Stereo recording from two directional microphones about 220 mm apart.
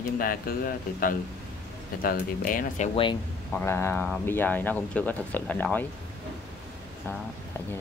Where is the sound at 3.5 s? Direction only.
10° left (ahead or behind).